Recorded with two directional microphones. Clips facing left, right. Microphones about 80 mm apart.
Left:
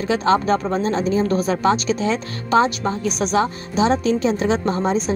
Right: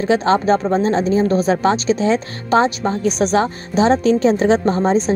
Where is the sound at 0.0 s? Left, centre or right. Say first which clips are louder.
Right 3 dB; right.